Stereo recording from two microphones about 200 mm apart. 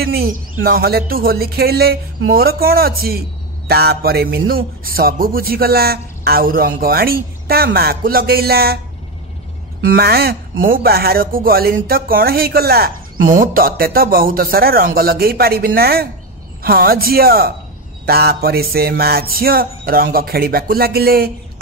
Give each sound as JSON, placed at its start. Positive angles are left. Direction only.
{"t": 0.0, "sound": "speech", "side_deg": -50}
{"t": 9.8, "sound": "speech", "side_deg": -50}